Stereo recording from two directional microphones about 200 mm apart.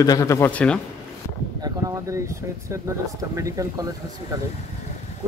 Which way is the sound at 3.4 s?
15° right (ahead or behind).